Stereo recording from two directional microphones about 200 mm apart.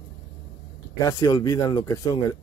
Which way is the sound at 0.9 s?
20° left (ahead or behind).